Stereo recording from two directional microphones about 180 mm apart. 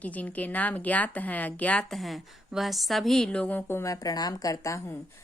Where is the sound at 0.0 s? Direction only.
10° left (ahead or behind).